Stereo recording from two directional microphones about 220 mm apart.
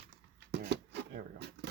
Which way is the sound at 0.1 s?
50° right (ahead or behind).